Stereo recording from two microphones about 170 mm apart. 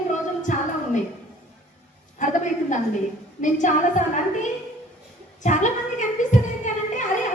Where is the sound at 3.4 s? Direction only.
45° left (ahead or behind).